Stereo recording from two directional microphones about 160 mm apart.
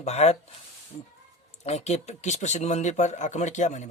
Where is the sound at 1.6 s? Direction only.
40° left (ahead or behind).